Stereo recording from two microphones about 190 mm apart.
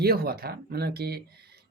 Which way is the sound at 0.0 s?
55° right (ahead or behind).